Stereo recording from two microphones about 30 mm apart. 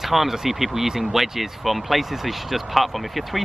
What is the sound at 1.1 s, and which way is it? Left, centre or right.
Speech, centre.